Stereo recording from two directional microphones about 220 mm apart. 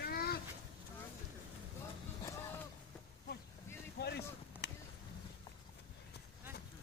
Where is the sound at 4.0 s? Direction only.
50° left (ahead or behind).